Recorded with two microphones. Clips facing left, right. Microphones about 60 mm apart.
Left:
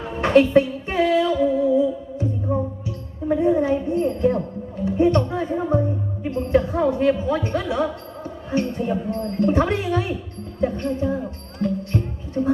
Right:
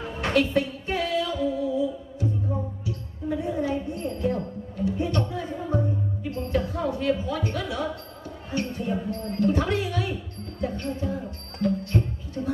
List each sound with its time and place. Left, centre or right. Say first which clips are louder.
0.1 s music: left 8 dB; left
3.3 s a sound: left 8 dB; left
4.8 s music: left 8 dB; left
8.5 s a woman's voice: left 6 dB; left
10.6 s music: left 7 dB; left